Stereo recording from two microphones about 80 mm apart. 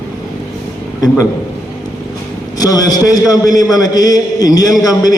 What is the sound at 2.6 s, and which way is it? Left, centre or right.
A man's voice, left.